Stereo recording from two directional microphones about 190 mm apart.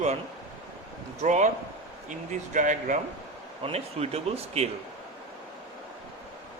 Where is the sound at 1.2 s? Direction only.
40° right (ahead or behind).